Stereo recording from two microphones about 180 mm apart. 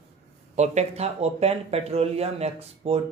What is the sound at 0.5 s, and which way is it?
Speech, 40° right (ahead or behind).